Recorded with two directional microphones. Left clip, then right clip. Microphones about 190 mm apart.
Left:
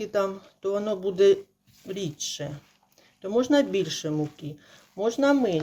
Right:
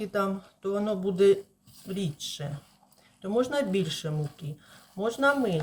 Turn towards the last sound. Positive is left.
turn(degrees=30)  # may be behind; listen again after turning